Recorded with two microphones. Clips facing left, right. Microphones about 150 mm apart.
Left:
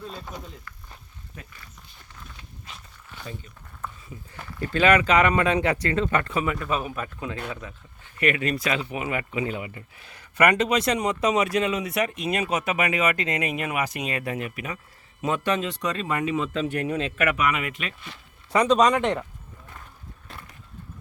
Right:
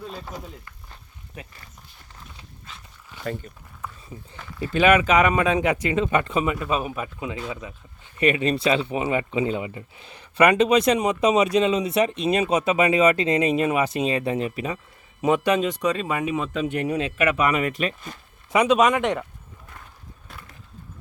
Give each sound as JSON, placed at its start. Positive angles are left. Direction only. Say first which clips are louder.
{"t": 0.1, "sound": "speech", "louder": "right 2 dB", "side_deg": -5}
{"t": 4.6, "sound": "speech", "louder": "right 2 dB", "side_deg": -15}
{"t": 15.2, "sound": "speech", "louder": "right 5 dB", "side_deg": -15}
{"t": 17.3, "sound": "speech", "louder": "right 4 dB", "side_deg": -35}
{"t": 18.5, "sound": "speech", "louder": "right 1 dB", "side_deg": -5}